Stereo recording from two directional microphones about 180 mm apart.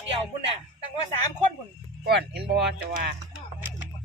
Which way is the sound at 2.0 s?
65° right (ahead or behind).